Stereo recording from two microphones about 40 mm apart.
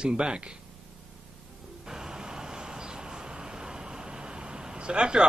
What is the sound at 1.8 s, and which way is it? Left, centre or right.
Vehicle, centre.